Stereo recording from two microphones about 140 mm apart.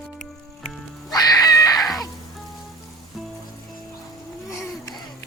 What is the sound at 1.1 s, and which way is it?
Screaming, 25° left (ahead or behind).